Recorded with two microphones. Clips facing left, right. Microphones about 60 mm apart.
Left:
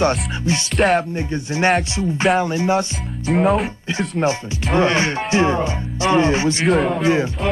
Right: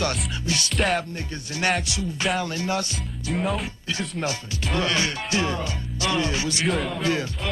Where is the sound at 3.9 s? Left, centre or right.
Left.